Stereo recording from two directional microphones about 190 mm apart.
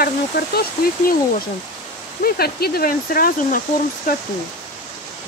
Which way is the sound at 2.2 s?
55° left (ahead or behind).